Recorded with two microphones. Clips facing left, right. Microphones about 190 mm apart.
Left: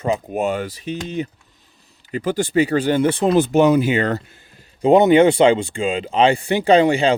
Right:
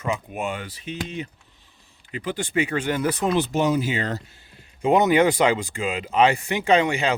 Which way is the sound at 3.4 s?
60° left (ahead or behind).